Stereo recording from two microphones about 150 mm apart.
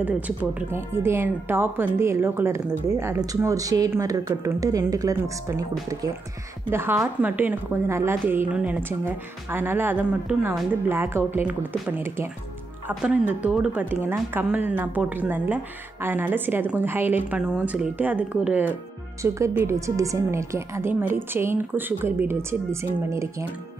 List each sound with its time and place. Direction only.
0.0 s speech: 10° right (ahead or behind)